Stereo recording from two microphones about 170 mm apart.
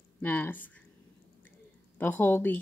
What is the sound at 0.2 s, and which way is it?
Speech, 10° left (ahead or behind).